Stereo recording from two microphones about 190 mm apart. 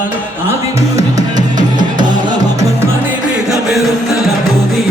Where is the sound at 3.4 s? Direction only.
Centre (ahead or behind).